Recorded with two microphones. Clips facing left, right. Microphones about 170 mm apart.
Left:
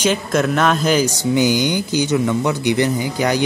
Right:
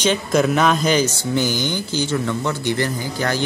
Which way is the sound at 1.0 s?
15° left (ahead or behind).